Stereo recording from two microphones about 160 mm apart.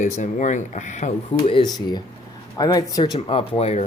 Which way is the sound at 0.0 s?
50° left (ahead or behind).